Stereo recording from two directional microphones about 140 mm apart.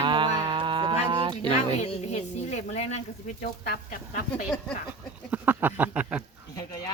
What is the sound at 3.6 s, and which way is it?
Speech, 90° left.